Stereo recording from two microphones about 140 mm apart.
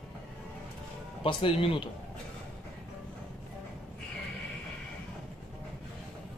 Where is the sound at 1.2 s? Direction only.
40° left (ahead or behind).